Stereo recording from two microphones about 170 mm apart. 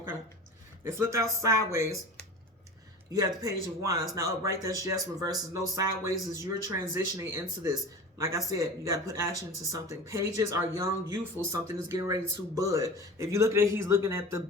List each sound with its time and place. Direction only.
0.9 s speech: 15° right (ahead or behind)
3.1 s speech: 20° right (ahead or behind)